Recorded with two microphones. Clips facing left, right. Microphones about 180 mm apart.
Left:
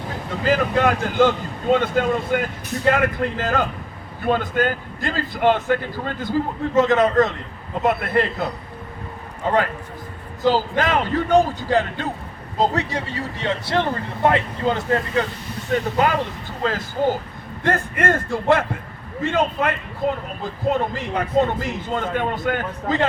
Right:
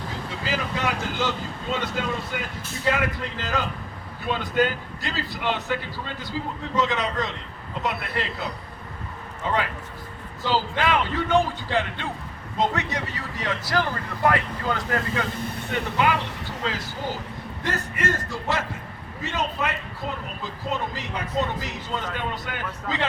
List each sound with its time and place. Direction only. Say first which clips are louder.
0.3 s a man's voice: left 10 dB; 50° left (ahead or behind)
9.5 s a man's voice: left 6 dB; 45° left (ahead or behind); by 15.3 s 30° left (ahead or behind)
16.0 s a man's voice: left 4 dB; 40° left (ahead or behind)